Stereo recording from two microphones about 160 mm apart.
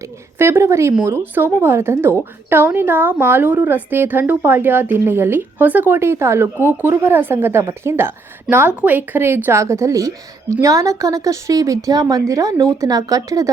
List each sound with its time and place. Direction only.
0.3 s a woman's voice: 15° right (ahead or behind)